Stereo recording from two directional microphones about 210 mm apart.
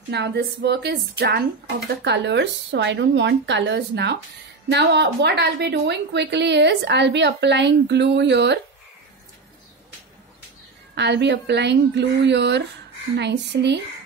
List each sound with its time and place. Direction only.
0.1 s a woman's voice: 50° right (ahead or behind)
11.0 s a woman's voice: 55° right (ahead or behind)